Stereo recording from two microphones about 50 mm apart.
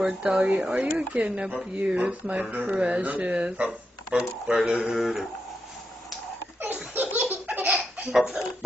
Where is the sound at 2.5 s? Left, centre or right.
Right.